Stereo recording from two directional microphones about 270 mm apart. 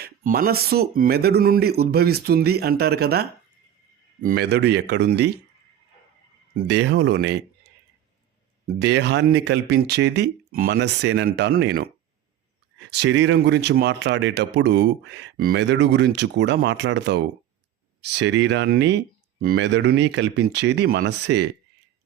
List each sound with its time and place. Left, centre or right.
0.0 s speech: right
6.7 s speech: right
8.6 s speech: right
12.9 s speech: right